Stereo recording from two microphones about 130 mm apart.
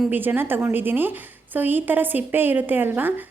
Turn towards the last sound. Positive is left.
turn(degrees=-15)  # may be behind; listen again after turning